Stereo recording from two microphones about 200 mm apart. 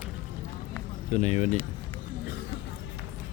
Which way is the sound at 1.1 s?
35° left (ahead or behind).